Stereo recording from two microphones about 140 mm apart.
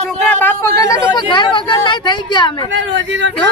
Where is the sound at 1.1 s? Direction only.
35° left (ahead or behind).